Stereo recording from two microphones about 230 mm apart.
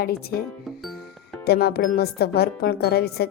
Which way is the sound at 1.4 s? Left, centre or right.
Left.